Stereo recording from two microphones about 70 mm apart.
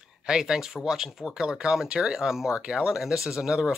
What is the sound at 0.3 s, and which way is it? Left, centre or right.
Speech, centre.